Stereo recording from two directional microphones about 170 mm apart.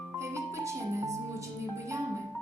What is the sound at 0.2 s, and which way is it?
Music, 15° right (ahead or behind).